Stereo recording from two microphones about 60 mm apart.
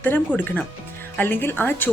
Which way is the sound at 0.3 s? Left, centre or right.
Left.